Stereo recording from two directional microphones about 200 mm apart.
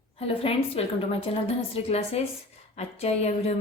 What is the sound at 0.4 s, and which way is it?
A woman's voice, 30° left (ahead or behind).